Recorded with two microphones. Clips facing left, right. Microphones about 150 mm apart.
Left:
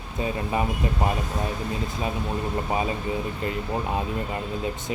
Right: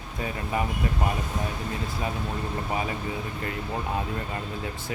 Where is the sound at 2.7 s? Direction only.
25° left (ahead or behind).